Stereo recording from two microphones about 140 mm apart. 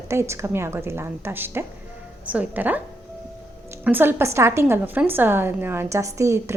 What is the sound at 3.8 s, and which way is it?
A woman's voice, 15° right (ahead or behind).